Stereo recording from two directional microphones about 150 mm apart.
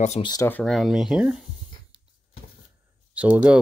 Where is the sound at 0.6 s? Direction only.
Centre (ahead or behind).